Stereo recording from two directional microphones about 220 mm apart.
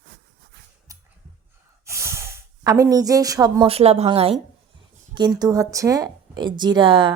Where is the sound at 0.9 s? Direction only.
15° right (ahead or behind).